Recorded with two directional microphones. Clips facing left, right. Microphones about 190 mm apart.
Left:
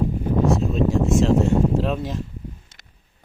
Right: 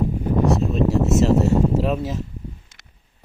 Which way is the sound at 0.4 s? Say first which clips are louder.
Right 1 dB; centre (ahead or behind).